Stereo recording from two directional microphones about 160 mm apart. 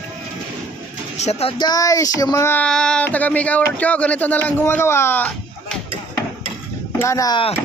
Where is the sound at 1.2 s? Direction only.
40° left (ahead or behind); by 5.7 s 10° left (ahead or behind).